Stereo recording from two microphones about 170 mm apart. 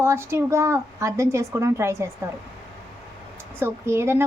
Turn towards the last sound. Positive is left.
turn(degrees=-15)  # may be behind; listen again after turning